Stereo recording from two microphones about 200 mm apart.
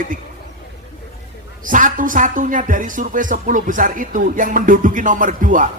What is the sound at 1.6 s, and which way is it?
Speech, 40° right (ahead or behind).